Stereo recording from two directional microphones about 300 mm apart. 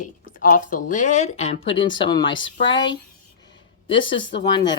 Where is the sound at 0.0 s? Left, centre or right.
Left.